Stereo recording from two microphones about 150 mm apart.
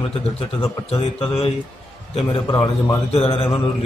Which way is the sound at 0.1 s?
40° left (ahead or behind).